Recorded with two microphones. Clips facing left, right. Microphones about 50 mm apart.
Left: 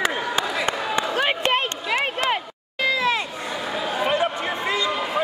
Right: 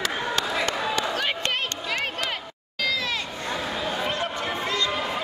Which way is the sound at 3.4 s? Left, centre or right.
Centre.